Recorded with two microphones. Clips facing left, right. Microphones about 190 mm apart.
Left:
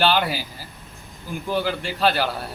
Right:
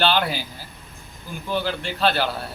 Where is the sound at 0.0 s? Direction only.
10° left (ahead or behind).